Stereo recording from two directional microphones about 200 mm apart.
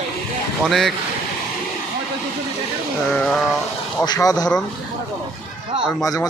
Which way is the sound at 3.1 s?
5° left (ahead or behind).